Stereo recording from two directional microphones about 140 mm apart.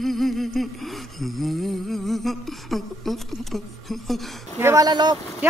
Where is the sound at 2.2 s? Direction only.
Centre (ahead or behind).